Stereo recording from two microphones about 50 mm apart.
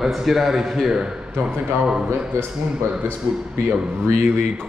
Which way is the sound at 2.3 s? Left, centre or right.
Right.